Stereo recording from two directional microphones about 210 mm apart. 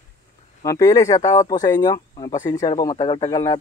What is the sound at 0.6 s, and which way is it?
Speech, 15° left (ahead or behind).